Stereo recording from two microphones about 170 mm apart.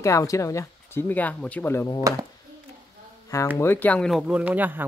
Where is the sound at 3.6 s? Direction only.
10° left (ahead or behind); by 4.8 s 10° right (ahead or behind).